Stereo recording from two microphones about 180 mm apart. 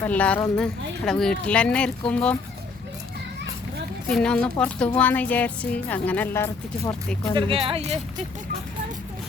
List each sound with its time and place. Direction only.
0.0 s speech: 10° left (ahead or behind)
4.1 s speech: 5° left (ahead or behind)
7.3 s speech: 30° right (ahead or behind)